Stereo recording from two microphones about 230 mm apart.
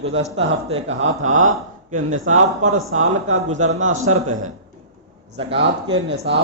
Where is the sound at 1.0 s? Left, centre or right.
Right.